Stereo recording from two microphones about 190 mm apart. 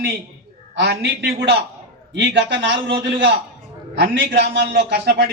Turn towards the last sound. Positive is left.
turn(degrees=-60)  # may be behind; listen again after turning